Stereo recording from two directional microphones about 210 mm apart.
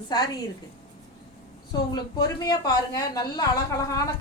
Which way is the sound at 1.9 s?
20° left (ahead or behind).